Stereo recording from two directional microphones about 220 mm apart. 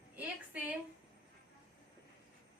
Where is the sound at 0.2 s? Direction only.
5° right (ahead or behind).